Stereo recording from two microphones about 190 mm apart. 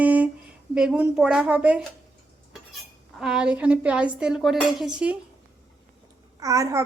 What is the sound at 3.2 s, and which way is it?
A woman's voice, 5° right (ahead or behind).